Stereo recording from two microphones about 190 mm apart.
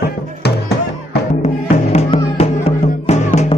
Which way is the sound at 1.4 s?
35° left (ahead or behind).